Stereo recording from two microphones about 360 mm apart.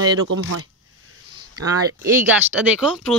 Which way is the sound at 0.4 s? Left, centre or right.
Right.